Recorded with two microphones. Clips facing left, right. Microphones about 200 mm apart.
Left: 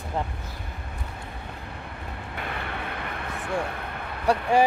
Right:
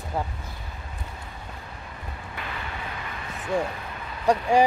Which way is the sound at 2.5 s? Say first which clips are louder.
Left 2 dB; 60° left (ahead or behind).